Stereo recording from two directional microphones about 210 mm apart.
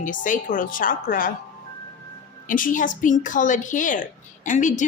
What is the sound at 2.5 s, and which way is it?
A woman's voice, 40° left (ahead or behind).